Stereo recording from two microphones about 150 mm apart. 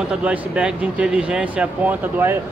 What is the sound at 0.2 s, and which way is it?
Speech, 5° right (ahead or behind).